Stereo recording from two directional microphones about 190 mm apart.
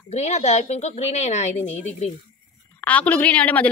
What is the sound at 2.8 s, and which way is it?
Speech, 5° left (ahead or behind).